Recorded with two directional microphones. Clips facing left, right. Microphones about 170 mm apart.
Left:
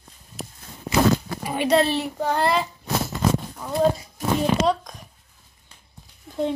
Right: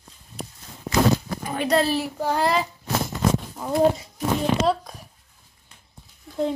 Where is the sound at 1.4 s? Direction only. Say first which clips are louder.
Left 3 dB; 5° left (ahead or behind).